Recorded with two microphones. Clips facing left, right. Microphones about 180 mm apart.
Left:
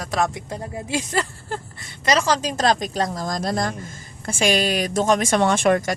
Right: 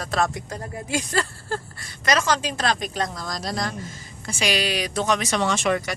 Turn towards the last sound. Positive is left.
turn(degrees=45)  # may be behind; listen again after turning